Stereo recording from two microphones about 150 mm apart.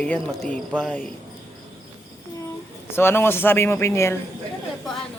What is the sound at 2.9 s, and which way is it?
Speech, 15° left (ahead or behind).